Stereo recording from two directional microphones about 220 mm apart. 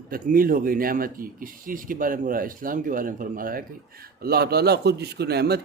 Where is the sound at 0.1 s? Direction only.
40° right (ahead or behind).